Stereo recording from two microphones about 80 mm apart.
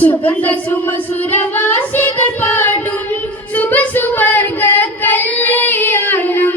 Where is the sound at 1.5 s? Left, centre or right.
Left.